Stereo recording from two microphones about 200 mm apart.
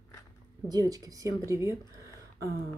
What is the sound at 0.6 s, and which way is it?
Speech, 20° right (ahead or behind).